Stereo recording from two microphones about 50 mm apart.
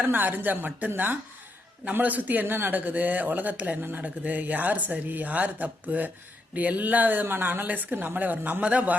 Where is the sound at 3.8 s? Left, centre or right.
Right.